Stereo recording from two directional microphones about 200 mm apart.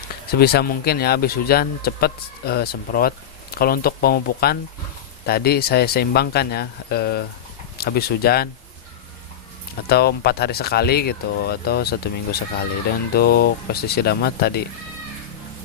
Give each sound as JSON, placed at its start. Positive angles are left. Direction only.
{"t": 0.3, "sound": "speech", "side_deg": 50}
{"t": 9.8, "sound": "speech", "side_deg": 50}